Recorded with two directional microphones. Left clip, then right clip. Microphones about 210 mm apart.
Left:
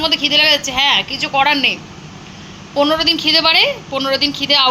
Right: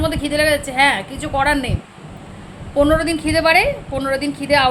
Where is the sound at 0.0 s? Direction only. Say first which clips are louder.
Left 5 dB; 20° right (ahead or behind).